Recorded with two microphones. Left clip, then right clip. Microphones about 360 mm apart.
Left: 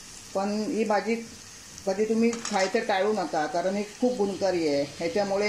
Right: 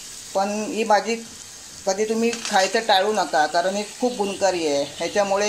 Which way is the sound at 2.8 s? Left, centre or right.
Right.